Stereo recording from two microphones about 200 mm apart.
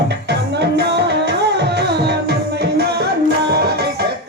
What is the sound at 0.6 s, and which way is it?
Music, 55° right (ahead or behind).